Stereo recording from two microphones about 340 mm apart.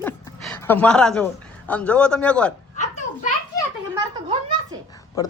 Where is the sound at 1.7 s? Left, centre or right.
Centre.